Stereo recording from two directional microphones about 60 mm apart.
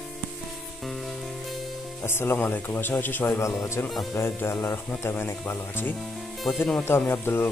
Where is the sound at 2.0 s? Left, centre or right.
Left.